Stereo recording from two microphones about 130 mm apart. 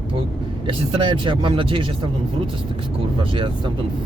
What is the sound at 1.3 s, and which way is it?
Speech, 40° right (ahead or behind).